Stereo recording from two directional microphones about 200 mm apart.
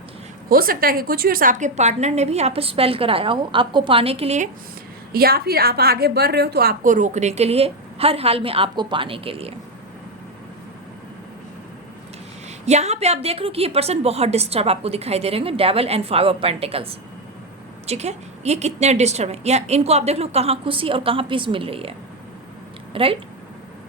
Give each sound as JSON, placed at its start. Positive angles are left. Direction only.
{"t": 0.4, "sound": "a woman's voice", "side_deg": -45}
{"t": 5.1, "sound": "a woman's voice", "side_deg": -50}
{"t": 12.6, "sound": "a woman's voice", "side_deg": -35}